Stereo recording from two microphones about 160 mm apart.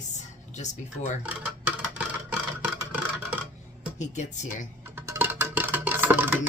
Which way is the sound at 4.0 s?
45° left (ahead or behind).